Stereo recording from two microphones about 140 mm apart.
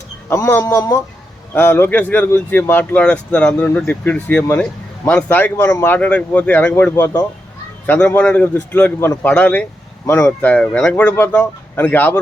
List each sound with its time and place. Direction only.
0.3 s a man's voice: 20° left (ahead or behind)
6.9 s a man's voice: 25° left (ahead or behind)
7.9 s speech: 10° left (ahead or behind)